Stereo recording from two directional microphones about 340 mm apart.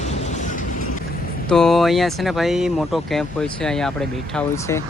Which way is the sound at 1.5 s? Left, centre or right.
Centre.